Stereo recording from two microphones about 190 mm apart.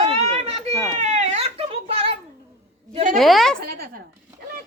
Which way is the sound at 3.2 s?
Centre (ahead or behind).